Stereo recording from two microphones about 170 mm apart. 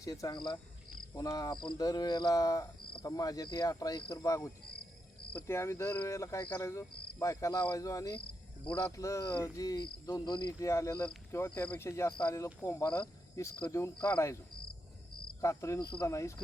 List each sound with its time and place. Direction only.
0.0 s speech: 20° left (ahead or behind)
15.4 s speech: 15° left (ahead or behind)